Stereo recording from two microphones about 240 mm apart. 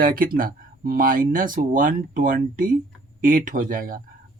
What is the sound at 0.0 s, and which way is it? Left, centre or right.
Speech, right.